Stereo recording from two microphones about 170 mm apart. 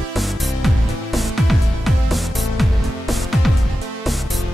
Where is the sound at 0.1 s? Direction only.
Centre (ahead or behind).